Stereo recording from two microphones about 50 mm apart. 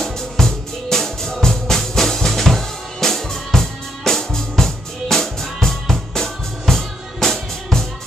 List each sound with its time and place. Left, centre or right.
0.0 s music: centre